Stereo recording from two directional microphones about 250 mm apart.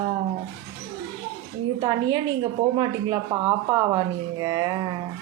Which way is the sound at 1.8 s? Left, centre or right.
Centre.